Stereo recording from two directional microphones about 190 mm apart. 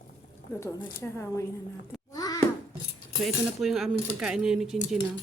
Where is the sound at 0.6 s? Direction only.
15° left (ahead or behind).